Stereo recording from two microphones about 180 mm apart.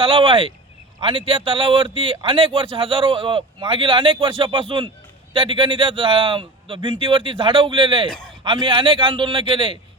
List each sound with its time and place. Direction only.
0.0 s a man's voice: 30° right (ahead or behind)
8.0 s a man's voice: 5° left (ahead or behind)
8.4 s a man's voice: 30° right (ahead or behind)